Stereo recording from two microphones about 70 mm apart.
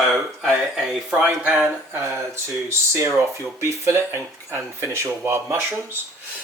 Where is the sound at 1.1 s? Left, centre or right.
Right.